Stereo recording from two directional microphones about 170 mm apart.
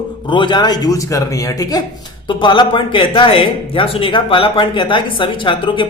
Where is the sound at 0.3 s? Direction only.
30° left (ahead or behind).